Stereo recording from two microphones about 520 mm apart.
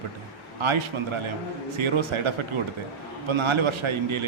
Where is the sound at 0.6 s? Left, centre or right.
Right.